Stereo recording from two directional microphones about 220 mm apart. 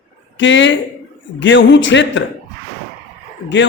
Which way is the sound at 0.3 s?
55° left (ahead or behind).